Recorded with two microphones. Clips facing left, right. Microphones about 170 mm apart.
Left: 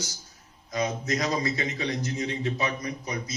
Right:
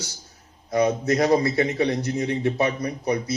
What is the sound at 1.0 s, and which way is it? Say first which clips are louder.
A man's voice: right 8 dB; 30° right (ahead or behind).